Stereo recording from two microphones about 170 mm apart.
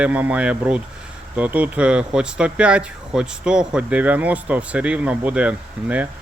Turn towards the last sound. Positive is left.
turn(degrees=-10)  # may be behind; listen again after turning